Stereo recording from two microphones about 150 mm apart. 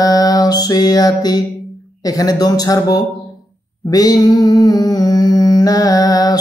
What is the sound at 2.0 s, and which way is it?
Speech, 25° left (ahead or behind).